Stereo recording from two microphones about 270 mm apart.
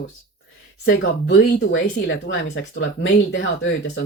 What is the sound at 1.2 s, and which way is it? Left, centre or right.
Speech, left.